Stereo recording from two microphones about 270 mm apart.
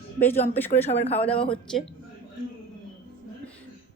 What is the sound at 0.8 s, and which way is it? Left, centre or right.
Speech, left.